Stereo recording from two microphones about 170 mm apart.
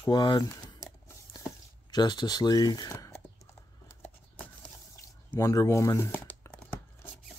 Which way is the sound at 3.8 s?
10° left (ahead or behind).